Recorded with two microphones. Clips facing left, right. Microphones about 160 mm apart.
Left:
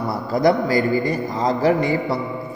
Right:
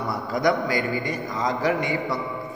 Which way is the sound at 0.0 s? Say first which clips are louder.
Left 5 dB; 35° left (ahead or behind).